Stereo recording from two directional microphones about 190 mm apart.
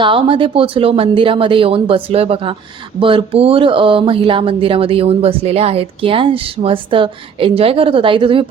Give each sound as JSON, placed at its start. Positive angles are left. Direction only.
{"t": 0.0, "sound": "speech", "side_deg": -25}